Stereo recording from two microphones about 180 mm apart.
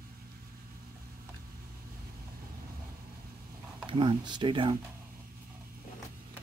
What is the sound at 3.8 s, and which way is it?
Speech, 25° right (ahead or behind).